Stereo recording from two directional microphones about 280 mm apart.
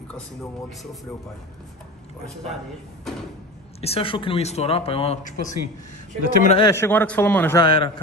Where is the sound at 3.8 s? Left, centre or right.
Left.